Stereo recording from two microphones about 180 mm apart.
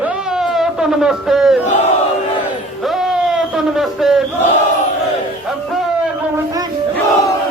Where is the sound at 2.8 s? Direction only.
Centre (ahead or behind).